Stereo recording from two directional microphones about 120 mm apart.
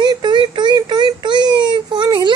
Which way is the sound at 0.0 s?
40° right (ahead or behind).